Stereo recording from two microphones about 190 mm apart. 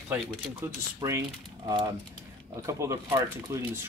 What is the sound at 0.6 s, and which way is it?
Speech, 15° right (ahead or behind).